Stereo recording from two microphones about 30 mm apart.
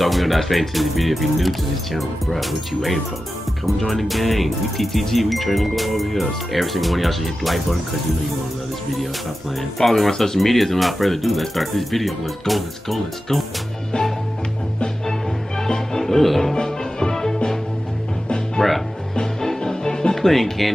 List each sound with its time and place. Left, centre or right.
0.0 s speech: centre
9.8 s speech: centre
15.6 s music: centre
16.6 s music: centre
18.6 s music: centre
20.2 s music: centre